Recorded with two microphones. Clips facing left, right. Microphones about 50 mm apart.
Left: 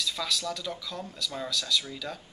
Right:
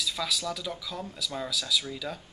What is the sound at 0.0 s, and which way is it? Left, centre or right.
Speech, centre.